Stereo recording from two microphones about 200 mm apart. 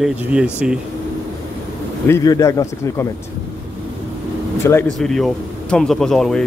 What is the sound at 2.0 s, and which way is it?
Speech, 15° left (ahead or behind).